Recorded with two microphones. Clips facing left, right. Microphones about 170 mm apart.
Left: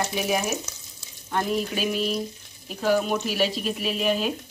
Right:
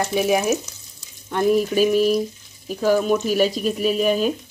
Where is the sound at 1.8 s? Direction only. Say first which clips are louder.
Right 9 dB; 45° right (ahead or behind).